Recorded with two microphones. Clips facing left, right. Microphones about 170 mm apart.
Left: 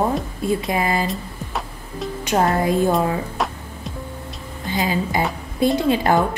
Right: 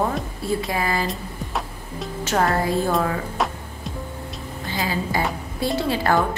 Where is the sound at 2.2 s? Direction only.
20° left (ahead or behind).